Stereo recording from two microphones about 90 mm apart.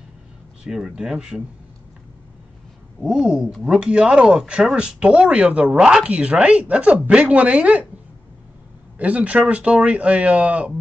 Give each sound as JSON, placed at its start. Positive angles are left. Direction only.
{"t": 0.7, "sound": "speech", "side_deg": -5}
{"t": 3.0, "sound": "speech", "side_deg": -5}
{"t": 8.9, "sound": "speech", "side_deg": -15}